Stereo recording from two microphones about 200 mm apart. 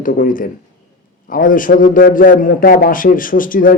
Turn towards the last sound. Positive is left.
turn(degrees=45)  # may be behind; listen again after turning